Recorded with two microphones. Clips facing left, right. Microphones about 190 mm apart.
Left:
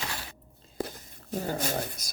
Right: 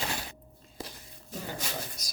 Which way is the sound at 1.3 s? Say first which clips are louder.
Left 7 dB; 45° left (ahead or behind).